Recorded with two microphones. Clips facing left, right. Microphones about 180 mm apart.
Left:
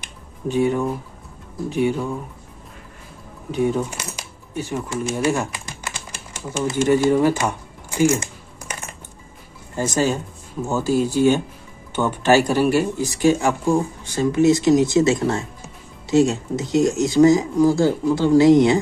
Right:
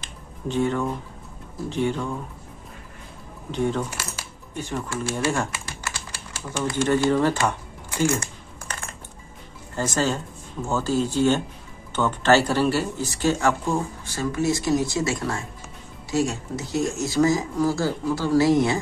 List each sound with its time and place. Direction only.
0.0 s a sound: 10° left (ahead or behind)
1.7 s speech: 10° left (ahead or behind)
3.5 s speech: 10° left (ahead or behind)
4.0 s coin: 15° left (ahead or behind)
5.7 s typewriter: 20° left (ahead or behind)
9.8 s speech: 15° left (ahead or behind)